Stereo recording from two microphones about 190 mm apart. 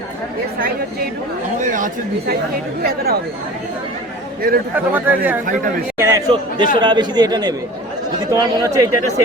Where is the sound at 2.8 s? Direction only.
55° right (ahead or behind).